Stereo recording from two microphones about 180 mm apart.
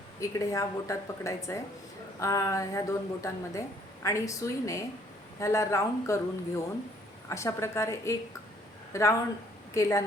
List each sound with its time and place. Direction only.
0.2 s a woman's voice: 15° left (ahead or behind)